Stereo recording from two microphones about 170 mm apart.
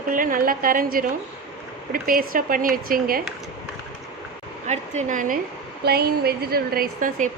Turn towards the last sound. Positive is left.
turn(degrees=-50)  # may be behind; listen again after turning